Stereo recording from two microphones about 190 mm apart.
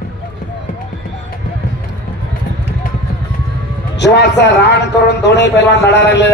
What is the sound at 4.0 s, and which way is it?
A man's voice, 65° left (ahead or behind).